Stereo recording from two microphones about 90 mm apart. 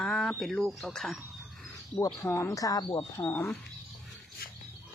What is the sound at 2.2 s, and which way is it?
Speech, 30° left (ahead or behind).